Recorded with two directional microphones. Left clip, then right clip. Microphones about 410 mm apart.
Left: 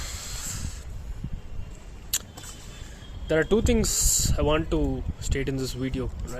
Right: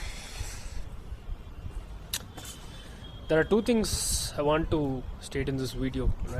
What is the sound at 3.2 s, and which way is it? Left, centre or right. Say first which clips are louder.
Speech: left 2 dB; centre.